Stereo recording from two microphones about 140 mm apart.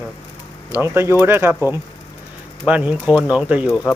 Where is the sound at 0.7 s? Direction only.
15° right (ahead or behind).